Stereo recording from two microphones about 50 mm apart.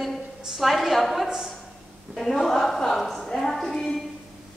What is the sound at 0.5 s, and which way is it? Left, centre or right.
A woman's voice, centre.